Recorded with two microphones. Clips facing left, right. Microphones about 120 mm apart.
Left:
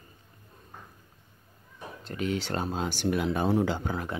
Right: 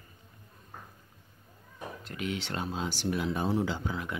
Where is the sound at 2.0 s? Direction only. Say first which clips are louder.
Left 5 dB; 35° left (ahead or behind).